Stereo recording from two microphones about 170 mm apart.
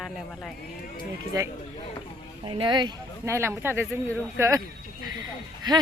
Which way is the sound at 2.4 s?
30° right (ahead or behind).